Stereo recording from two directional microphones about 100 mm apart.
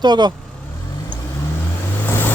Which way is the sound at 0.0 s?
45° right (ahead or behind).